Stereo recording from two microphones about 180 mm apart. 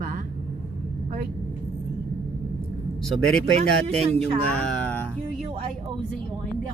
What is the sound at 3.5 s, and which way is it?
Speech, 35° right (ahead or behind).